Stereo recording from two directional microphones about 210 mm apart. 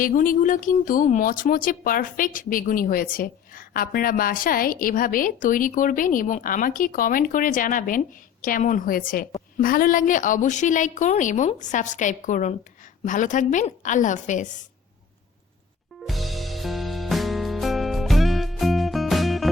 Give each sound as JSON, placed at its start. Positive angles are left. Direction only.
{"t": 0.0, "sound": "speech", "side_deg": 40}
{"t": 16.0, "sound": "music", "side_deg": 0}